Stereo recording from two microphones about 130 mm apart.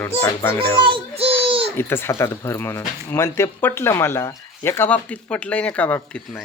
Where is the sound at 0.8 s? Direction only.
45° right (ahead or behind).